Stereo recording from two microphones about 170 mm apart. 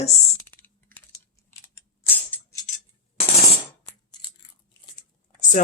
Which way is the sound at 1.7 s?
10° left (ahead or behind).